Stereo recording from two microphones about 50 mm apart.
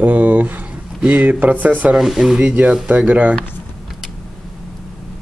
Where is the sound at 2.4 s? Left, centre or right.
Right.